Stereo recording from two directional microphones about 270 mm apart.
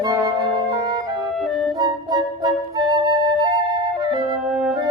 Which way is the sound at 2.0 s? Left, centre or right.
Centre.